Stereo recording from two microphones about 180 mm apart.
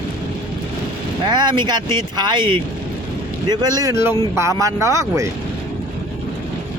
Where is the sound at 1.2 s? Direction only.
25° right (ahead or behind).